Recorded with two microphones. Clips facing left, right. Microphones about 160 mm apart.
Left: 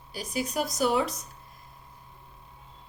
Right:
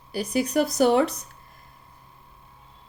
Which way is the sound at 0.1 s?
60° right (ahead or behind).